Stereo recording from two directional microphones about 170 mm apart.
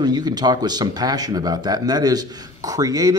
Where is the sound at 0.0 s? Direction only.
25° right (ahead or behind).